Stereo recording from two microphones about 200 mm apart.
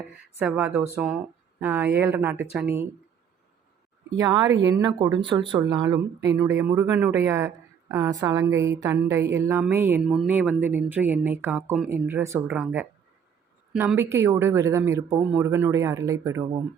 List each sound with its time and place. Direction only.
0.3 s a woman's voice: 10° right (ahead or behind)
4.2 s a woman's voice: 15° right (ahead or behind)